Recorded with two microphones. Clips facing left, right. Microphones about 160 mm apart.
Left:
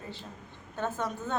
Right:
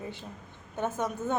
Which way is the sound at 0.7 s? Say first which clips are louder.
Right 2 dB; 20° right (ahead or behind).